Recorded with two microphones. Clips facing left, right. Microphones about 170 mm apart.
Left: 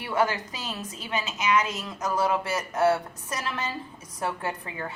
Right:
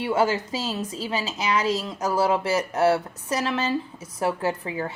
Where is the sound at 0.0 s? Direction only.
25° right (ahead or behind).